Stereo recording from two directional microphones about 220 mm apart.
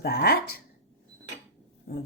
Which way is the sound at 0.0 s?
45° left (ahead or behind).